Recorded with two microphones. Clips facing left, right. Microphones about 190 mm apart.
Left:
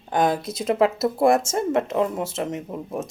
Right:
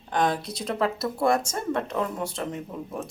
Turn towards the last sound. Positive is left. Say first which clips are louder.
# left 4 dB
turn(degrees=20)  # may be behind; listen again after turning